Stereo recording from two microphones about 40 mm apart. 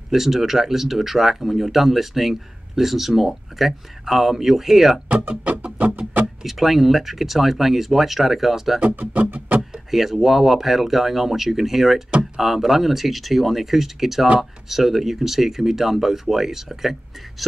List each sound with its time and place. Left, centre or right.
0.1 s speech: centre
5.0 s music: right
6.4 s speech: centre
9.1 s music: right
9.8 s speech: centre